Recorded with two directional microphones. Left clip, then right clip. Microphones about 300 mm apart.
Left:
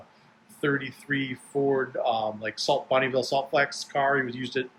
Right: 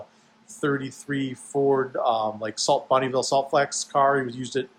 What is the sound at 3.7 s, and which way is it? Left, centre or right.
Speech, right.